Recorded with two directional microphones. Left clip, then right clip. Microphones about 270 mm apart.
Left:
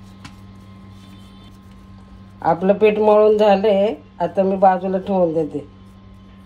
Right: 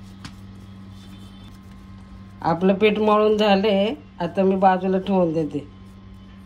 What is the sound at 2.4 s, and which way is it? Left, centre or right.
Speech, right.